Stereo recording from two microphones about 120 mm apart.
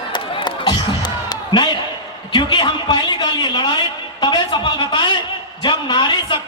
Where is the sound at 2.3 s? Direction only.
35° left (ahead or behind).